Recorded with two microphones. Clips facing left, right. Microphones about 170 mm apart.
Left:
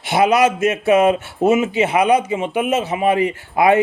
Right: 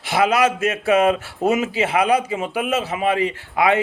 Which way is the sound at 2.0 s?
30° right (ahead or behind).